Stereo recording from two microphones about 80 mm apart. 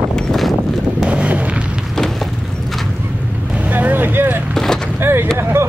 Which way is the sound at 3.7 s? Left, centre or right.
Right.